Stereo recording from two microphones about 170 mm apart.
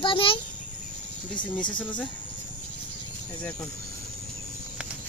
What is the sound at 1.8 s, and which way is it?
Speech, 10° left (ahead or behind).